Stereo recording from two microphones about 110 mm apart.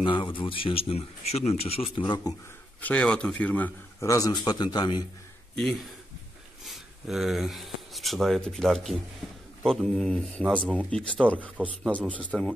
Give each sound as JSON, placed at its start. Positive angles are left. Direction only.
{"t": 0.0, "sound": "speech", "side_deg": 50}
{"t": 2.8, "sound": "a man's voice", "side_deg": 10}
{"t": 4.0, "sound": "a man's voice", "side_deg": 30}
{"t": 6.6, "sound": "a man's voice", "side_deg": 0}
{"t": 11.4, "sound": "a man's voice", "side_deg": -15}
{"t": 12.3, "sound": "speech", "side_deg": 0}